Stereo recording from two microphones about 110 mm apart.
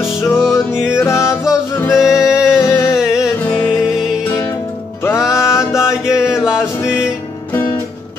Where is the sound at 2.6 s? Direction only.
25° left (ahead or behind).